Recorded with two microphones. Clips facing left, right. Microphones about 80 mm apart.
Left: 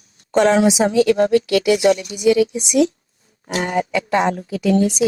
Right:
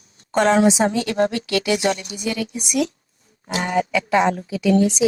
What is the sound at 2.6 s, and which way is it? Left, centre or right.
Speech, left.